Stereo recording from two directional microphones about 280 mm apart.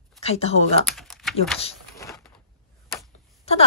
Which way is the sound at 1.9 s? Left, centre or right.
Centre.